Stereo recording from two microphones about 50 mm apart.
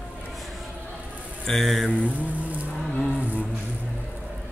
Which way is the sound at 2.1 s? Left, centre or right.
Right.